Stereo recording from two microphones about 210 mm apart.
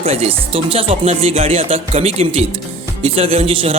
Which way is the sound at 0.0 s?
30° right (ahead or behind).